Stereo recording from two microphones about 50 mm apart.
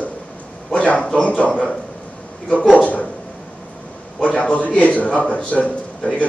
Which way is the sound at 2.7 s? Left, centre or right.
Left.